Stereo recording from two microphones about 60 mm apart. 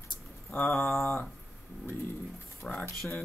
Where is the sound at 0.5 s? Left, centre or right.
Left.